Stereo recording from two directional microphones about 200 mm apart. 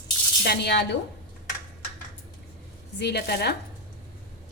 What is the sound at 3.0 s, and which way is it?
Speech, 55° left (ahead or behind).